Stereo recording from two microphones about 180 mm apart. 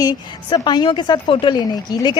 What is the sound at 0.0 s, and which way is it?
A woman's voice, 25° left (ahead or behind).